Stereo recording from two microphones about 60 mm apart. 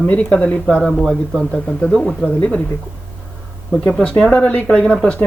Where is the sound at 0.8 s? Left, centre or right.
Centre.